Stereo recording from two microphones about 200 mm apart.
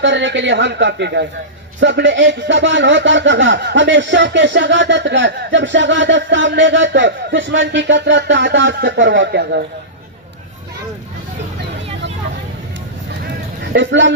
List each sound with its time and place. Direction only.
0.0 s speech: 65° right (ahead or behind)
13.7 s speech: 65° right (ahead or behind)